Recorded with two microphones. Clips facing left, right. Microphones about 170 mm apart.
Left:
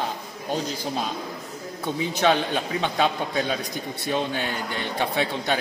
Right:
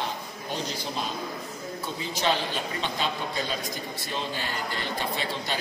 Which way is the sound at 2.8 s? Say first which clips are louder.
Left 8 dB; 60° left (ahead or behind).